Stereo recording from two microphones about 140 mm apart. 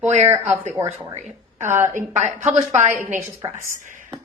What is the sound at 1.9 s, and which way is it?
Speech, 55° right (ahead or behind).